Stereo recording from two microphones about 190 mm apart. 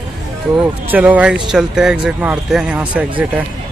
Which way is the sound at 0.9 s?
10° right (ahead or behind).